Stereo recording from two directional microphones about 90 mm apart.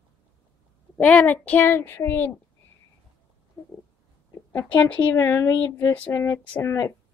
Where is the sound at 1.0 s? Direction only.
15° left (ahead or behind).